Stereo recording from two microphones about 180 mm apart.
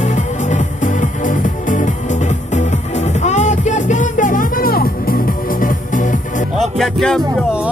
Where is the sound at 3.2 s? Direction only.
40° left (ahead or behind).